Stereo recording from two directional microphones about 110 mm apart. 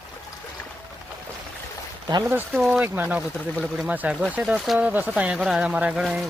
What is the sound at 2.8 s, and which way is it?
Speech, 15° right (ahead or behind).